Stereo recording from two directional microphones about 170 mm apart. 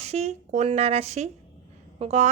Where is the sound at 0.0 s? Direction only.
40° right (ahead or behind).